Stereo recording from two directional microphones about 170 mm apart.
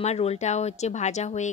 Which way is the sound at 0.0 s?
40° left (ahead or behind).